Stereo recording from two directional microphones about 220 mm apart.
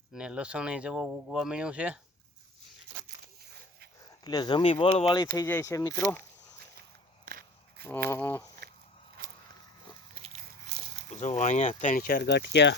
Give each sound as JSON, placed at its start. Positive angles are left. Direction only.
{"t": 0.1, "sound": "speech", "side_deg": -5}
{"t": 4.0, "sound": "speech", "side_deg": 20}
{"t": 7.3, "sound": "a sound", "side_deg": -40}
{"t": 8.1, "sound": "speech", "side_deg": 10}
{"t": 9.2, "sound": "a sound", "side_deg": -40}
{"t": 10.2, "sound": "biting", "side_deg": -25}
{"t": 11.1, "sound": "speech", "side_deg": 30}